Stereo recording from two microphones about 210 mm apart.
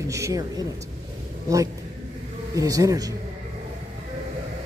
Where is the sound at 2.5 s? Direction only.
15° right (ahead or behind).